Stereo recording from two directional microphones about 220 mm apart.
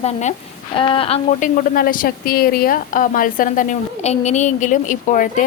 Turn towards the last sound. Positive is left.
turn(degrees=35)  # may be behind; listen again after turning